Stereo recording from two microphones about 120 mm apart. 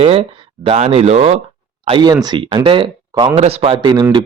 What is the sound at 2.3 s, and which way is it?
Speech, 45° right (ahead or behind).